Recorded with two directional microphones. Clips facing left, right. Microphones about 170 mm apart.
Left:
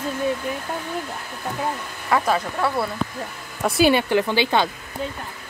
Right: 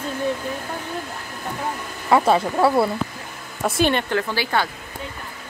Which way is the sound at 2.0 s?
25° right (ahead or behind).